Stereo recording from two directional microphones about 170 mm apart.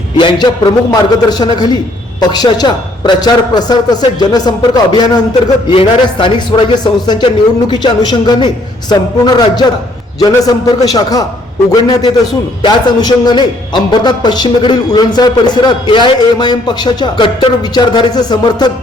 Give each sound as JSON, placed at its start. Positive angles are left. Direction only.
{"t": 0.2, "sound": "a man's voice", "side_deg": 25}